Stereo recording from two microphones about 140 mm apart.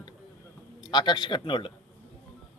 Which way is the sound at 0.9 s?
35° left (ahead or behind).